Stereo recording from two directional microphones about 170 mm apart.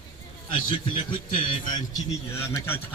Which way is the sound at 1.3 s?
30° left (ahead or behind).